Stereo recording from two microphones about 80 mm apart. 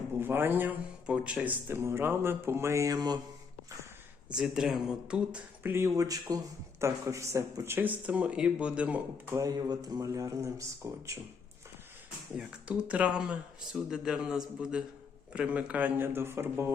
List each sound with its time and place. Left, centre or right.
0.2 s a man's voice: right
1.0 s speech: centre
1.6 s speech: right
4.3 s speech: centre
5.6 s speech: right
5.9 s speech: right
6.7 s speech: right
7.9 s speech: centre
9.4 s speech: right
12.4 s speech: centre
16.0 s speech: right